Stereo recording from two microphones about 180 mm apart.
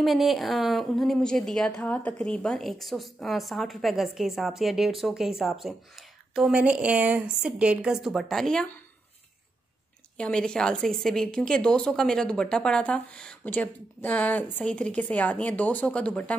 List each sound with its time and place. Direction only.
0.0 s a woman's voice: centre (ahead or behind)
10.1 s a woman's voice: 5° left (ahead or behind)